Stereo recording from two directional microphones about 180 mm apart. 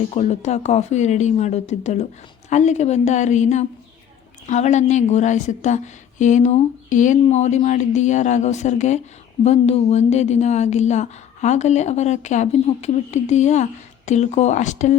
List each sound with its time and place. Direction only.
0.1 s a woman's voice: 40° left (ahead or behind)